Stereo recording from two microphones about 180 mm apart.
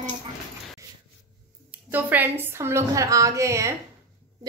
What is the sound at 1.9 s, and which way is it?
A woman's voice, 10° right (ahead or behind).